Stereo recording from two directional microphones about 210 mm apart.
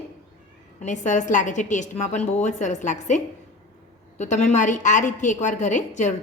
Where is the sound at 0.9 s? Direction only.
35° left (ahead or behind).